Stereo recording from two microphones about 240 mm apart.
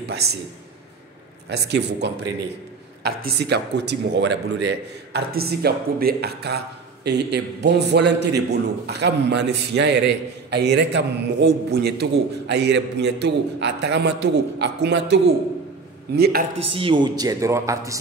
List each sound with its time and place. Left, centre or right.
1.7 s a man's voice: right
16.2 s speech: right
16.6 s speech: right